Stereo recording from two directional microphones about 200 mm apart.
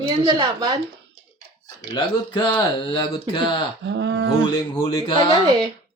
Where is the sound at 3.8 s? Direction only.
60° right (ahead or behind).